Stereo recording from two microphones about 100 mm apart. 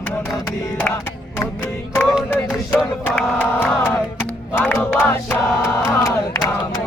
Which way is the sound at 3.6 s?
20° left (ahead or behind).